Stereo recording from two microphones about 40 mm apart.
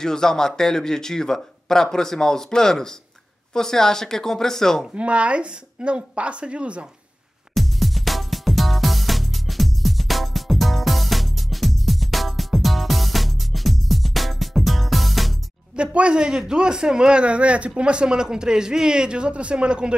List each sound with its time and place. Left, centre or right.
0.0 s speech: centre
4.9 s a man's voice: right
7.5 s music: centre
15.7 s a man's voice: right